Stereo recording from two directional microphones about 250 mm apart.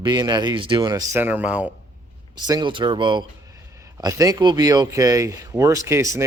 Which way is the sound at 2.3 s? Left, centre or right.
Centre.